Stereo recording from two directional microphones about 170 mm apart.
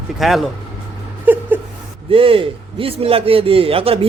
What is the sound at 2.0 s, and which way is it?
A man's voice, 30° right (ahead or behind).